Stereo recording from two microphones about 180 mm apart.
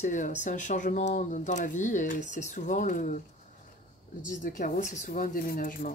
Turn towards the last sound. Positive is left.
turn(degrees=50)  # may be behind; listen again after turning